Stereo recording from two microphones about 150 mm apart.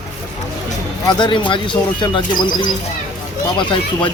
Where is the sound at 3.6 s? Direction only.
30° left (ahead or behind).